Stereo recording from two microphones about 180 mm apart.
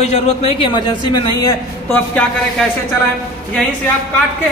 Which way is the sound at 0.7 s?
25° left (ahead or behind).